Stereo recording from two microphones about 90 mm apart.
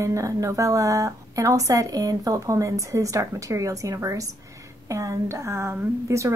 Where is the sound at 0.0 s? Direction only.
35° right (ahead or behind).